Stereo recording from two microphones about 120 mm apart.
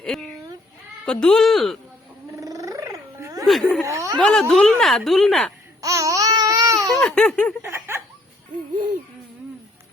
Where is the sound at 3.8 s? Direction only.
25° right (ahead or behind).